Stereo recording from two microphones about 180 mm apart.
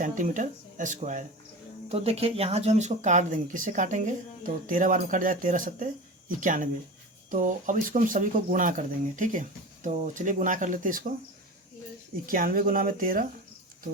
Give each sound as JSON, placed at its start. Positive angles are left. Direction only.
{"t": 0.0, "sound": "speech", "side_deg": -45}
{"t": 12.2, "sound": "speech", "side_deg": -50}